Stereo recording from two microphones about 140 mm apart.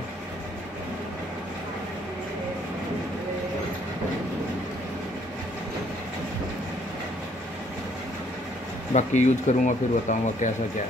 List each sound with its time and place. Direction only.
8.9 s speech: 55° left (ahead or behind)